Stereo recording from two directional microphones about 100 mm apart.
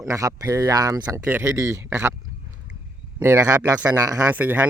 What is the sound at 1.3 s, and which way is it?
Speech, 30° right (ahead or behind).